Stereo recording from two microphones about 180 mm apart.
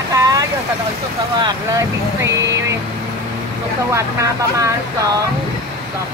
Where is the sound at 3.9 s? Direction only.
15° right (ahead or behind).